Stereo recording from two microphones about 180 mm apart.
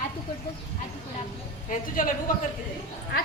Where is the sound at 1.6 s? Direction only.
50° left (ahead or behind).